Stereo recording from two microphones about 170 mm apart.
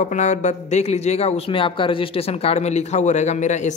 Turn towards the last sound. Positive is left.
turn(degrees=45)  # may be behind; listen again after turning